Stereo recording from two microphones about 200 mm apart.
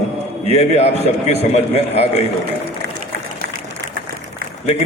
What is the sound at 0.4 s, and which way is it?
A man's voice, 30° left (ahead or behind).